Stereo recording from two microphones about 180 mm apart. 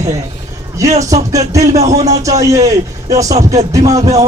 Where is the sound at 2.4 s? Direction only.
20° right (ahead or behind).